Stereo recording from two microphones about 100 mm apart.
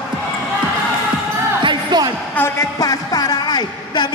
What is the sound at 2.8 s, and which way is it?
A woman's voice, 40° left (ahead or behind).